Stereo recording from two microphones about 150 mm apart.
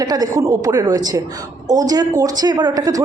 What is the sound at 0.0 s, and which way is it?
Speech, 25° right (ahead or behind).